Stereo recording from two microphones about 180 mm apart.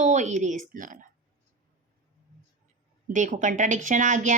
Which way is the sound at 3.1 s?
45° right (ahead or behind).